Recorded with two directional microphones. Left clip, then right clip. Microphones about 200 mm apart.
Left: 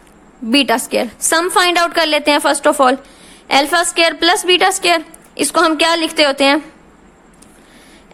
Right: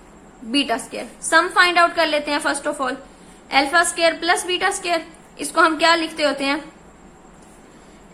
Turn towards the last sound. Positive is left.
turn(degrees=55)  # may be behind; listen again after turning